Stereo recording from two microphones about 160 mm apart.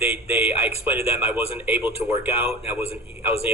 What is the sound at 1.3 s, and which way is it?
A man's voice, 10° right (ahead or behind).